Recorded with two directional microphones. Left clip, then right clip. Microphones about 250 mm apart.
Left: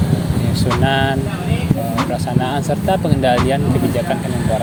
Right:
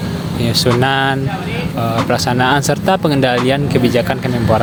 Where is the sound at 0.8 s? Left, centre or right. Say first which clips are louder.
Right 2 dB; right.